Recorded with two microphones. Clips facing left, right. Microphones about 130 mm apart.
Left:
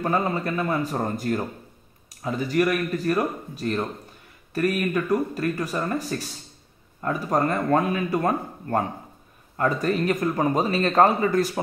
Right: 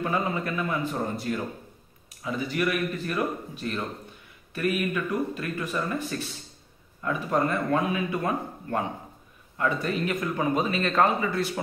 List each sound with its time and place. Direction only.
0.0 s speech: 40° left (ahead or behind)